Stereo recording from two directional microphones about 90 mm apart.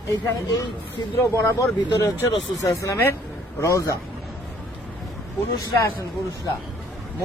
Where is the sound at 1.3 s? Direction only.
30° left (ahead or behind).